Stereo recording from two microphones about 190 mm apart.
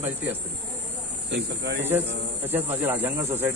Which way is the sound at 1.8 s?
10° right (ahead or behind).